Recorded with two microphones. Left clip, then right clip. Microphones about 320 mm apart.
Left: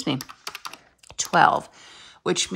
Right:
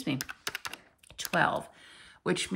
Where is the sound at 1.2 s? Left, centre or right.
Centre.